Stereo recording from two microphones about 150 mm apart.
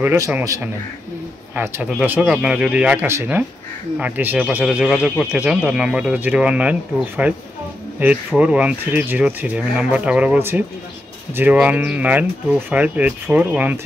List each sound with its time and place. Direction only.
0.0 s speech: 15° right (ahead or behind)